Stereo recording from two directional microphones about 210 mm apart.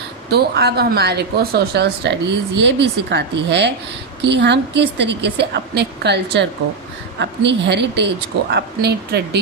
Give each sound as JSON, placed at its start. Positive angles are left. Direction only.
{"t": 0.3, "sound": "a woman's voice", "side_deg": -50}